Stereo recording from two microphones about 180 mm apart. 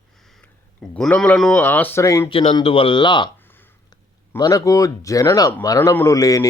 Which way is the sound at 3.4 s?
10° left (ahead or behind).